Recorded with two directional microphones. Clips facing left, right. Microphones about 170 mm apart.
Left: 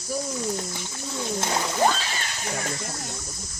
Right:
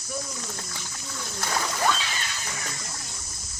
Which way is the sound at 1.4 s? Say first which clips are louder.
Left 3 dB; 25° left (ahead or behind).